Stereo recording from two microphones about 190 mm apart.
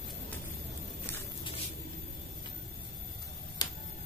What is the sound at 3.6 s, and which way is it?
Tick-tock, 20° left (ahead or behind).